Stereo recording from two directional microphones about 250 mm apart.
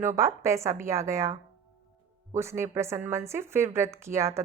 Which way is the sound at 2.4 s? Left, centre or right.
Centre.